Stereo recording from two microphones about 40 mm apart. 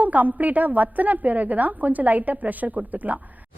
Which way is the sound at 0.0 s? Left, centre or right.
Right.